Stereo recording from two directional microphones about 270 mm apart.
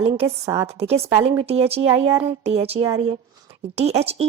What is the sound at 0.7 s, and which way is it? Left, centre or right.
Speech, right.